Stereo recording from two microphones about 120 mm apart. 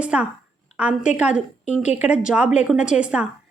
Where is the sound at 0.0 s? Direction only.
10° right (ahead or behind).